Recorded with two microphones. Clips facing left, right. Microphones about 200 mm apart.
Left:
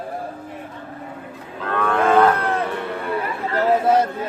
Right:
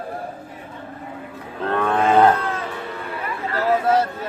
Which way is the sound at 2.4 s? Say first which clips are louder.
Left 4 dB; 60° left (ahead or behind).